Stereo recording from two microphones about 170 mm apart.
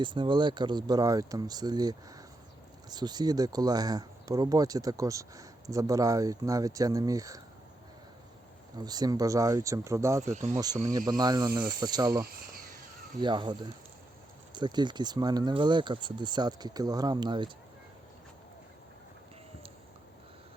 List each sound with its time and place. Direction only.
0.0 s speech: 30° right (ahead or behind)
8.8 s speech: 25° right (ahead or behind)